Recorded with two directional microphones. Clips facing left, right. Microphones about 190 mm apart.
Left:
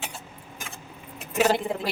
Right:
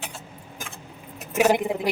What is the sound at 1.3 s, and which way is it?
Speech, 15° right (ahead or behind).